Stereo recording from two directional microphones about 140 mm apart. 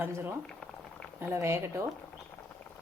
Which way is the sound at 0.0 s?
15° right (ahead or behind).